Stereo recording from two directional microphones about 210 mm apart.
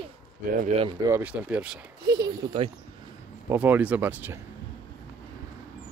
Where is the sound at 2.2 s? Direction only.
25° right (ahead or behind).